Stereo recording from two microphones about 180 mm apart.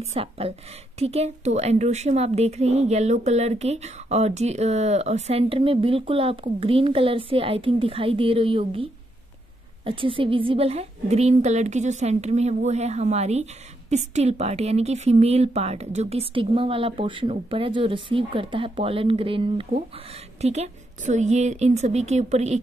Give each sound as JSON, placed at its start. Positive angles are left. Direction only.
{"t": 0.0, "sound": "a woman's voice", "side_deg": -35}
{"t": 9.8, "sound": "a woman's voice", "side_deg": -30}